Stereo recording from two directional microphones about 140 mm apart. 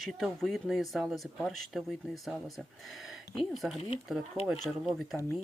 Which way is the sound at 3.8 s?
45° left (ahead or behind).